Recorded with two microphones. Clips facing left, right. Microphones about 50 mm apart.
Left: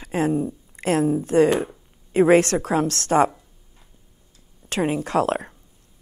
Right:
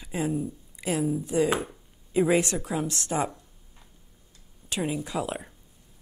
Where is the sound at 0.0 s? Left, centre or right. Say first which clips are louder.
Left 7 dB; left.